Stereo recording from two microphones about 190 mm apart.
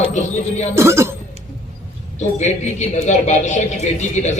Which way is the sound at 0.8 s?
15° right (ahead or behind).